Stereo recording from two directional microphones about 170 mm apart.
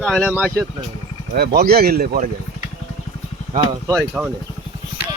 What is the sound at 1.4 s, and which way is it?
Speech, 70° right (ahead or behind).